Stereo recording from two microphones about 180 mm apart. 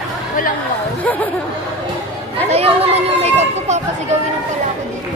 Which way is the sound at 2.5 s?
35° right (ahead or behind).